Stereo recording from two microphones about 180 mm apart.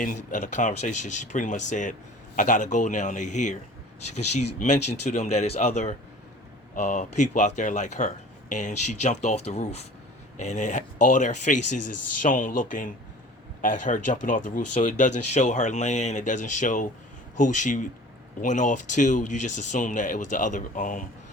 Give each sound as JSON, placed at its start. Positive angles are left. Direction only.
{"t": 0.0, "sound": "speech", "side_deg": 45}